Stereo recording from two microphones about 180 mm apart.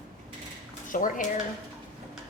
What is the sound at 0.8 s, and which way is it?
Speech, 45° left (ahead or behind).